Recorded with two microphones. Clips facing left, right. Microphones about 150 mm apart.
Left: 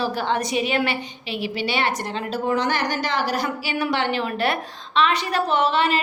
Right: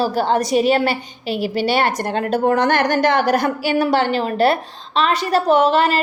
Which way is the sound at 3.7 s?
40° right (ahead or behind).